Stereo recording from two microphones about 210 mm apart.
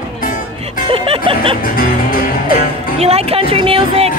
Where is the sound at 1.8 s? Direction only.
45° left (ahead or behind).